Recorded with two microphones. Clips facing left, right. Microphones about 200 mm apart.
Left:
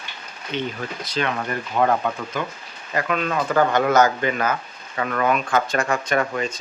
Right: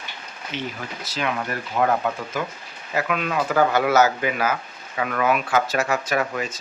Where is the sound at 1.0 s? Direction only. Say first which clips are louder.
Left 1 dB; 5° right (ahead or behind).